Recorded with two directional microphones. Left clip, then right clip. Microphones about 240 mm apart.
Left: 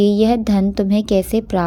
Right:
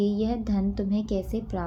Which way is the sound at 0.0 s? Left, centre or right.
Left.